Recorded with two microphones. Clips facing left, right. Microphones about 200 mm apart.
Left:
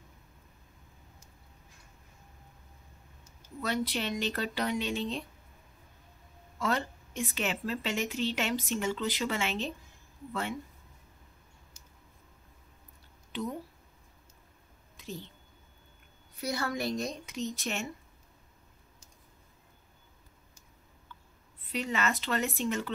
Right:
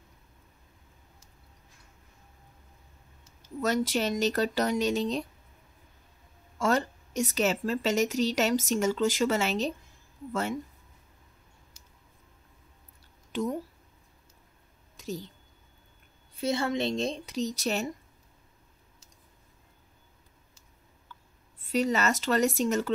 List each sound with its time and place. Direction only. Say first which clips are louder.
3.6 s speech: right 5 dB; 45° right (ahead or behind)
6.6 s a woman's voice: right 5 dB; 45° right (ahead or behind)
13.3 s speech: right 5 dB; 45° right (ahead or behind)
15.0 s a sound: right 6 dB; 40° right (ahead or behind)
16.3 s a woman's voice: right 5 dB; 25° right (ahead or behind)
21.7 s a woman's voice: right 6 dB; 40° right (ahead or behind)